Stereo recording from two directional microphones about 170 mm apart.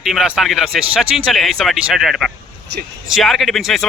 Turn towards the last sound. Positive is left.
turn(degrees=0)  # may be behind; listen again after turning